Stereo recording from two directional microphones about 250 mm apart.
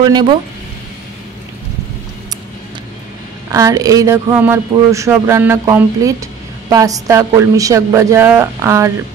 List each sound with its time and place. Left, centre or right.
0.0 s speech: centre
3.4 s speech: centre